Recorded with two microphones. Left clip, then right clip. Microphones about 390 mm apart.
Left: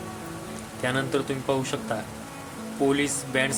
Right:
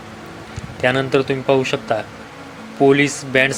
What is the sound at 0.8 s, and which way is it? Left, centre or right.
Speech, left.